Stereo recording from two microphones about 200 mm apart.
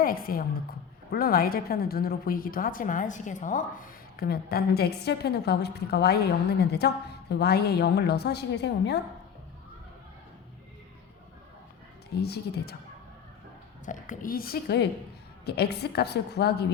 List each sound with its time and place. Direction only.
0.0 s a woman's voice: 45° left (ahead or behind)
12.1 s a woman's voice: 55° left (ahead or behind)
13.8 s a woman's voice: 40° left (ahead or behind)